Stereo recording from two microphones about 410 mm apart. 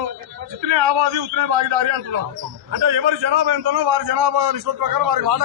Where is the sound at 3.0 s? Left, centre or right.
Right.